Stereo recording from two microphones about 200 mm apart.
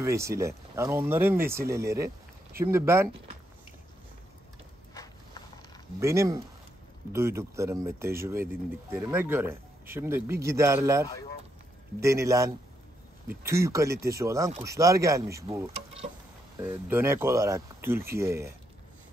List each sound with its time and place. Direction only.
0.0 s speech: 15° right (ahead or behind)
5.9 s speech: 15° right (ahead or behind)
15.7 s speech: 30° right (ahead or behind)
16.5 s speech: 10° right (ahead or behind)